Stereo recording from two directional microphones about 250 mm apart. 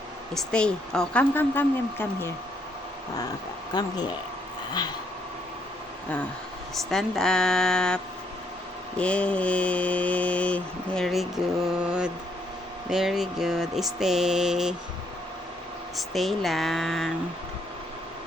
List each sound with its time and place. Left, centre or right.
0.3 s speech: centre
3.7 s speech: centre
6.9 s mantra: centre
16.0 s mantra: centre